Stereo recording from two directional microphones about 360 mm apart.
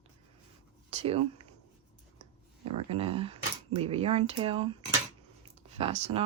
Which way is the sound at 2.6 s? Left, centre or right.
Centre.